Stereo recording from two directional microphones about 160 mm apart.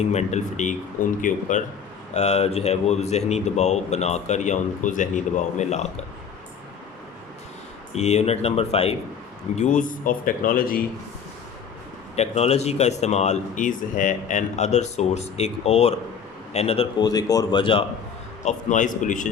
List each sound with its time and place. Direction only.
0.0 s a man's voice: 45° left (ahead or behind)
7.9 s speech: 40° left (ahead or behind)
9.6 s speech: 50° left (ahead or behind)
12.1 s a man's voice: 40° left (ahead or behind)
17.0 s speech: 25° left (ahead or behind)
18.4 s a man's voice: 50° left (ahead or behind)